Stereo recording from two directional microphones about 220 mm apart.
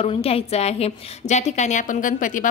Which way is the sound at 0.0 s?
25° left (ahead or behind).